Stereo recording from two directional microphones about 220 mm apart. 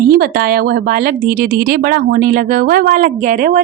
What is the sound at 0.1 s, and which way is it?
A woman's voice, 45° right (ahead or behind).